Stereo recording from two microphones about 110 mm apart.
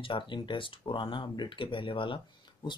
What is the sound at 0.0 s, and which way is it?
Speech, 50° left (ahead or behind).